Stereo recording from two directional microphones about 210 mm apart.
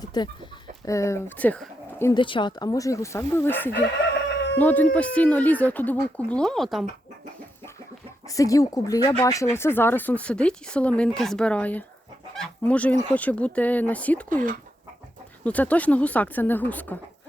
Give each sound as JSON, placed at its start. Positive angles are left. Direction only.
{"t": 0.0, "sound": "speech", "side_deg": 20}
{"t": 8.3, "sound": "speech", "side_deg": 15}
{"t": 15.4, "sound": "speech", "side_deg": 5}